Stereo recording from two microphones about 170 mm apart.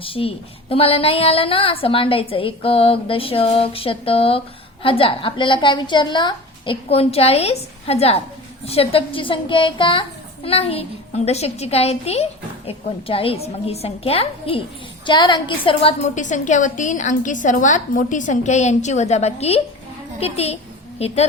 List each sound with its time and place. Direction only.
0.0 s a woman's voice: 35° left (ahead or behind)
16.2 s a woman's voice: 45° left (ahead or behind)